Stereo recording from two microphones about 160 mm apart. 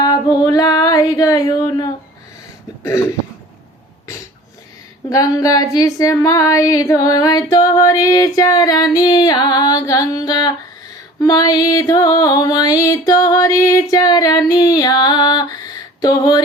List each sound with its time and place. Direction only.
0.0 s music: 25° left (ahead or behind)
5.0 s music: 20° left (ahead or behind)